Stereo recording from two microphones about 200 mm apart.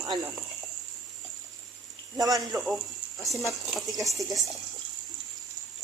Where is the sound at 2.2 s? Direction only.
15° right (ahead or behind).